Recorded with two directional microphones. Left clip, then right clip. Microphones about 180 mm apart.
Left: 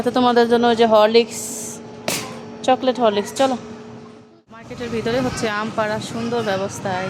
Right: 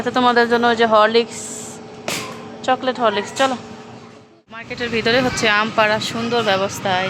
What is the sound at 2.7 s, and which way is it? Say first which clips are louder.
Speech: left 1 dB; 35° left (ahead or behind).